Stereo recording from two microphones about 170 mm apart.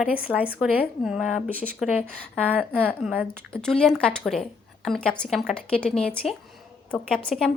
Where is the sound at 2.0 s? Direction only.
5° left (ahead or behind).